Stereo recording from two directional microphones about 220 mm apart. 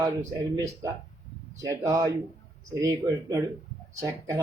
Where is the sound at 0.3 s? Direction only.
15° right (ahead or behind).